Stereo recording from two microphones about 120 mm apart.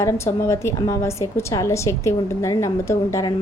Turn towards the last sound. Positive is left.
turn(degrees=25)  # may be behind; listen again after turning